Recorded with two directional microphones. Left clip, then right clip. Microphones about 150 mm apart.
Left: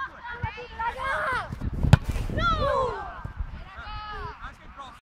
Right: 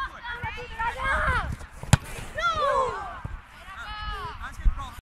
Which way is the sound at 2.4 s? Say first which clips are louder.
Right 1 dB; 15° left (ahead or behind).